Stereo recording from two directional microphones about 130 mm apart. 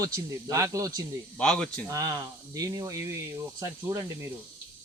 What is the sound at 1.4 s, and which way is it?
Speech, 5° left (ahead or behind).